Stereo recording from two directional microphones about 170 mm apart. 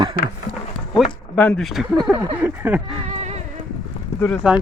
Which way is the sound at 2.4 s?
10° right (ahead or behind).